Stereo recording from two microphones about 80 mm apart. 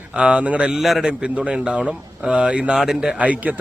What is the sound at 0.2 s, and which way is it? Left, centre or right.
A man's voice, centre.